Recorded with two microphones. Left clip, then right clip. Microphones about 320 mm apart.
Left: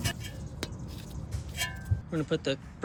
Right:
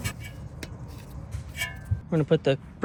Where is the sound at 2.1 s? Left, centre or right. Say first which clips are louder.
Right 7 dB; centre.